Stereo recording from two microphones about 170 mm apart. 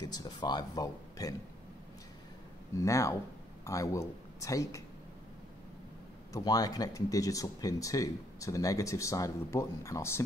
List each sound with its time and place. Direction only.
0.0 s speech: 25° left (ahead or behind)
2.7 s speech: 20° left (ahead or behind)
6.3 s speech: 20° left (ahead or behind)